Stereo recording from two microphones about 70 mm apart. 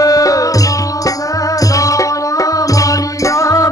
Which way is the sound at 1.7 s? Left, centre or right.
Left.